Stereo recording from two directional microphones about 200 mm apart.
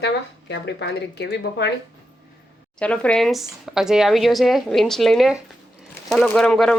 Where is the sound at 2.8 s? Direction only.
5° left (ahead or behind).